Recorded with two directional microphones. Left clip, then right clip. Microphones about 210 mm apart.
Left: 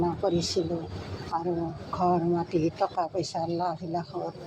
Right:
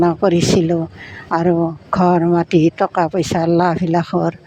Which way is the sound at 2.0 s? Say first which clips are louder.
Right 11 dB; 45° right (ahead or behind).